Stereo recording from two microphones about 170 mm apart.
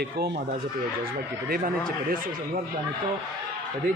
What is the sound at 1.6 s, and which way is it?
Speech, 60° right (ahead or behind).